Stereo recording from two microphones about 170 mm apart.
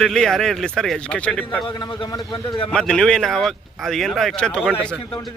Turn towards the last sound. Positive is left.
turn(degrees=5)  # may be behind; listen again after turning